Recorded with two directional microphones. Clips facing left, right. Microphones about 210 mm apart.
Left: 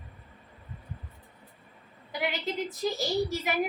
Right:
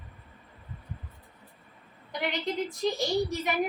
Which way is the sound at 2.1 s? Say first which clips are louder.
Right 1 dB; 5° left (ahead or behind).